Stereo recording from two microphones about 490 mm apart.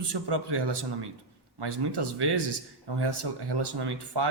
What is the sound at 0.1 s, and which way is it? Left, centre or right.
Speech, right.